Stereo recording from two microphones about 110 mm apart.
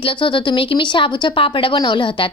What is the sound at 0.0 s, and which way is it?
Speech, 50° left (ahead or behind).